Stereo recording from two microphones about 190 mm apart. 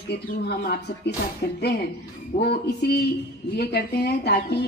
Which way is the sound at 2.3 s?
55° left (ahead or behind).